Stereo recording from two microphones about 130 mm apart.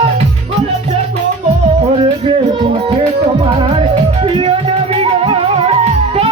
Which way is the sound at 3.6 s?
45° right (ahead or behind).